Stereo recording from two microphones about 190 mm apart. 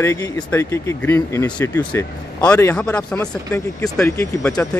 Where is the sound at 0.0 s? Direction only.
15° left (ahead or behind).